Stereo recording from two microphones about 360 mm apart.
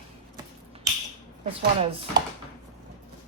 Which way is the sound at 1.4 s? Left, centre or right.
Centre.